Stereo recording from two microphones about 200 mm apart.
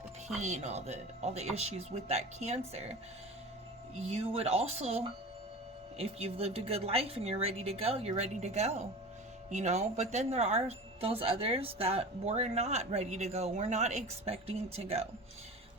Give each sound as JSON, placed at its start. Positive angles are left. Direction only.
{"t": 0.3, "sound": "speech", "side_deg": -35}